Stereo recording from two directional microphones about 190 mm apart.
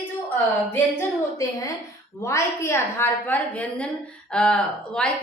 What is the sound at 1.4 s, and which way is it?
A woman's voice, 15° left (ahead or behind).